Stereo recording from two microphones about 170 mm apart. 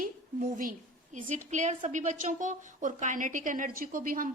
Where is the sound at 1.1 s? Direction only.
45° right (ahead or behind).